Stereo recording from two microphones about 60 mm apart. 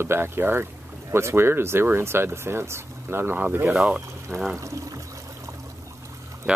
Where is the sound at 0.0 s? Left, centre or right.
Right.